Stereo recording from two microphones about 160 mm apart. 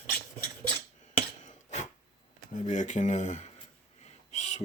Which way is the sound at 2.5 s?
50° left (ahead or behind).